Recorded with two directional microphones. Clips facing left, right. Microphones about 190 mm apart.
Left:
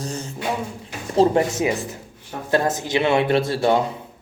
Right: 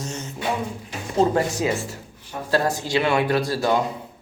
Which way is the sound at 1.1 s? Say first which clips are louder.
Left 3 dB; 30° left (ahead or behind).